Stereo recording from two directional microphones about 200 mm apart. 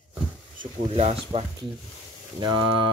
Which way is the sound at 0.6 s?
30° right (ahead or behind).